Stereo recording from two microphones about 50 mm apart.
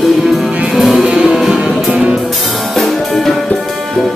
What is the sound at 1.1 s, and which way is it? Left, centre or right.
Music, centre.